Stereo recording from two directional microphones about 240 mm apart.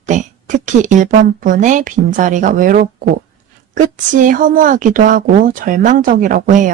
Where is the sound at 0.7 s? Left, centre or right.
Right.